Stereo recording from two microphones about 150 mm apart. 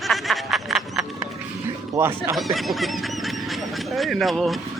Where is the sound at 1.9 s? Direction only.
15° right (ahead or behind).